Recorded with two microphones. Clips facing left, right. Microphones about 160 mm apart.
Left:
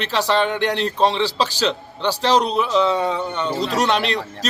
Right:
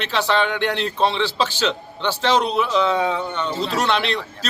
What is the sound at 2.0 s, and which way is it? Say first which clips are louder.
Speech: left 2 dB; 35° left (ahead or behind).